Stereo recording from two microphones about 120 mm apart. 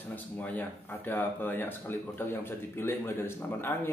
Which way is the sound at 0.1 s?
15° left (ahead or behind).